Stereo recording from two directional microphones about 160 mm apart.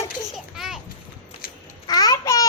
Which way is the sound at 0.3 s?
Centre (ahead or behind).